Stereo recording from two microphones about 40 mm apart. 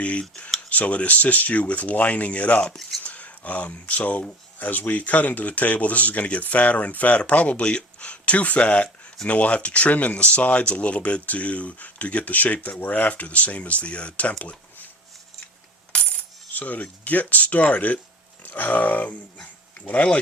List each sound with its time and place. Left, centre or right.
0.0 s speech: left
15.9 s coin: left
16.5 s speech: left
18.4 s speech: left